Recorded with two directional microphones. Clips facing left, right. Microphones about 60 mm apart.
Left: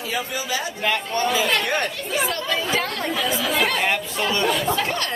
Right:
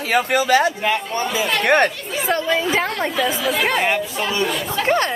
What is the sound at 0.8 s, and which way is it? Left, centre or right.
Speech, centre.